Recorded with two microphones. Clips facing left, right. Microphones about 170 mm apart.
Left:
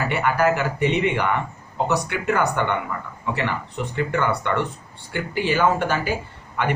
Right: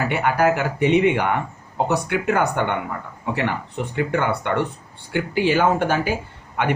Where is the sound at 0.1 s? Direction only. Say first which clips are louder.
Even; 55° right (ahead or behind).